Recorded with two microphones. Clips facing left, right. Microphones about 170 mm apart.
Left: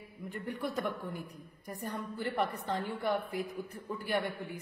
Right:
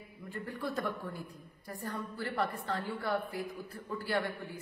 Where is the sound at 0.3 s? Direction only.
20° left (ahead or behind).